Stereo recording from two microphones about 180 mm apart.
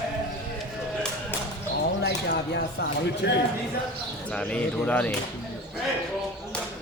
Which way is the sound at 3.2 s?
70° left (ahead or behind).